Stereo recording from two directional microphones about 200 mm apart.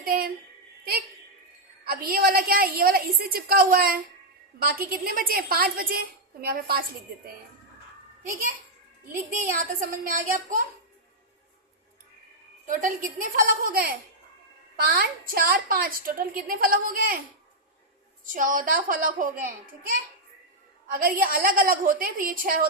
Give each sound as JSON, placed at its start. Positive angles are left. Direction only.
{"t": 0.0, "sound": "a sound", "side_deg": -45}
{"t": 1.8, "sound": "a woman's voice", "side_deg": -45}
{"t": 9.3, "sound": "speech", "side_deg": -40}
{"t": 12.6, "sound": "a woman's voice", "side_deg": -40}
{"t": 18.3, "sound": "a woman's voice", "side_deg": -45}
{"t": 20.9, "sound": "a woman's voice", "side_deg": -45}